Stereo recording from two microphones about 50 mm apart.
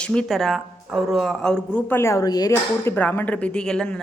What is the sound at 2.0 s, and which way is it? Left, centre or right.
Speech, left.